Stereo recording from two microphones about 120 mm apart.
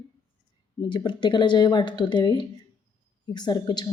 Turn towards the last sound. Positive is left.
turn(degrees=35)  # may be behind; listen again after turning